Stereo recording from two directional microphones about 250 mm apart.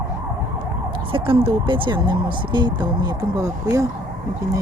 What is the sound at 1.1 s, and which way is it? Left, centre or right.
Speech, right.